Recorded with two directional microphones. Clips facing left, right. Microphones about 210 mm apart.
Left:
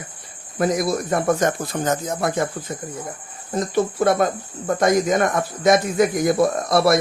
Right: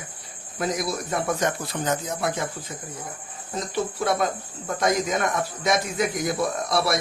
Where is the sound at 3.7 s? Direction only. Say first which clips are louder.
Left 6 dB; 50° left (ahead or behind).